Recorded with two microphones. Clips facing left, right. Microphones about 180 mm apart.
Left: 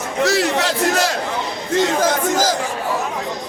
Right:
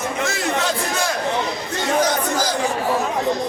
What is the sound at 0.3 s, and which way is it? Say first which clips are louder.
Crowd: left 4 dB; 85° left.